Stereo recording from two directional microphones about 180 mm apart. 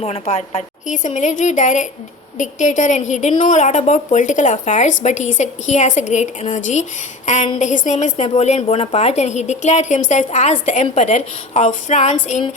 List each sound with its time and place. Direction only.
0.0 s a woman's voice: 35° left (ahead or behind)